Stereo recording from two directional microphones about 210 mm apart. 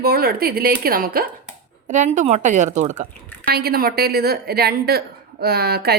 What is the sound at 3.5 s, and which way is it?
A woman's voice, 45° right (ahead or behind).